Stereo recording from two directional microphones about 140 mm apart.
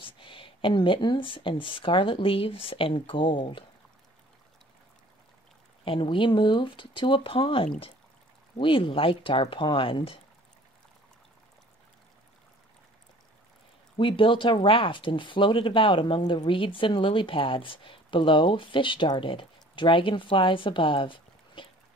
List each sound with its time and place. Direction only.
0.0 s speech: 40° left (ahead or behind)
5.9 s speech: 35° left (ahead or behind)
13.9 s speech: 40° left (ahead or behind)